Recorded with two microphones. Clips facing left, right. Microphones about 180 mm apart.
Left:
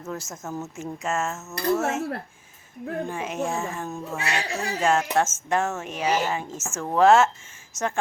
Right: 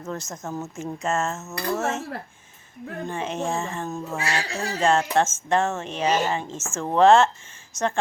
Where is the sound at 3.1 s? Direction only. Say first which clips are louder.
Right 5 dB; 5° left (ahead or behind).